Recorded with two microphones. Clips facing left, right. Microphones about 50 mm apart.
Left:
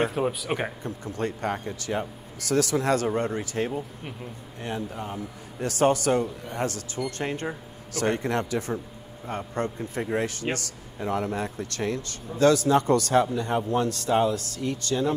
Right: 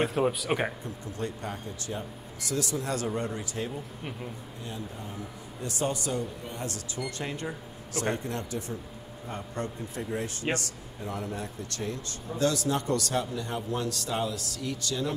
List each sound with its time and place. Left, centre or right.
0.0 s speech: centre
0.8 s speech: left
3.1 s speech: left
4.6 s speech: left
7.0 s speech: centre
8.0 s speech: left
10.4 s speech: centre
11.0 s speech: left
12.4 s speech: left